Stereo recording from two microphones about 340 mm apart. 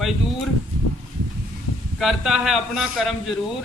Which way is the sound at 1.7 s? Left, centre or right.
Left.